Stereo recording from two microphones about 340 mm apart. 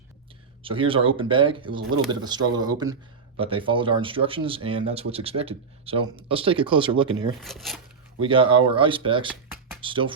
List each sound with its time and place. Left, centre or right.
0.6 s speech: centre
7.4 s speech: centre
8.2 s speech: centre